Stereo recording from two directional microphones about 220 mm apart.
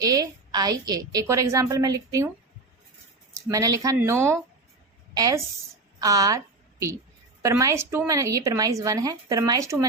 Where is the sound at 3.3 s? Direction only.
15° right (ahead or behind).